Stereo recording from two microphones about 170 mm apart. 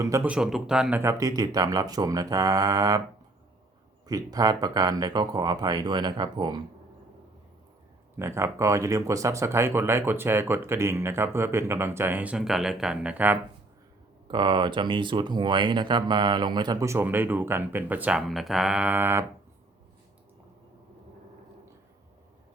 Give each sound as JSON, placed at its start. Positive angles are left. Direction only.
{"t": 0.0, "sound": "speech", "side_deg": -15}
{"t": 0.3, "sound": "speech", "side_deg": -5}
{"t": 4.0, "sound": "speech", "side_deg": -20}
{"t": 8.1, "sound": "speech", "side_deg": -15}
{"t": 14.3, "sound": "speech", "side_deg": -25}